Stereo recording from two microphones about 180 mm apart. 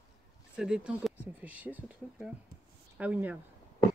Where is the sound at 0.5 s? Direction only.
5° right (ahead or behind).